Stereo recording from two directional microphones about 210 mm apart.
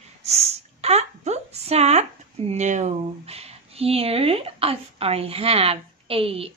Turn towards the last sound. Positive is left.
turn(degrees=-25)  # may be behind; listen again after turning